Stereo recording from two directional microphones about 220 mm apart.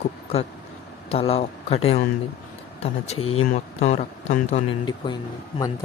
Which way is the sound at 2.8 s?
25° left (ahead or behind).